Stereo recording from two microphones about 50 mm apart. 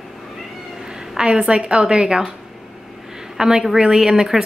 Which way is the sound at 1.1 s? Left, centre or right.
Centre.